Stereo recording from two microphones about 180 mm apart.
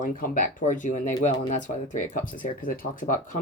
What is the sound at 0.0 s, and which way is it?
Speech, 50° left (ahead or behind).